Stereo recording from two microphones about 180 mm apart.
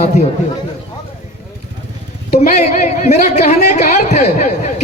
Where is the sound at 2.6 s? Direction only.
40° left (ahead or behind).